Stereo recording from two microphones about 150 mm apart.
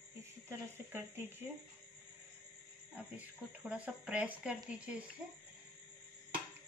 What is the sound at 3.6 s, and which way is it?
Speech, 10° right (ahead or behind).